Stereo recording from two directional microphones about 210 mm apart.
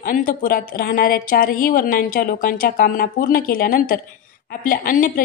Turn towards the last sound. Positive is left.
turn(degrees=40)  # may be behind; listen again after turning